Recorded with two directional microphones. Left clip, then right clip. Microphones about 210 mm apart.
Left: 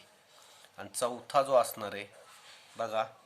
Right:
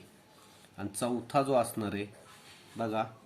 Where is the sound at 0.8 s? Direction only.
25° left (ahead or behind).